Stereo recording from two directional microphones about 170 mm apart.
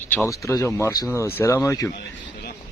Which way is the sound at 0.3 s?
15° left (ahead or behind).